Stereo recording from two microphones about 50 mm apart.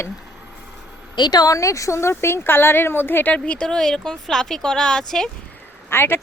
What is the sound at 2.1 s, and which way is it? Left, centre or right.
A woman's voice, left.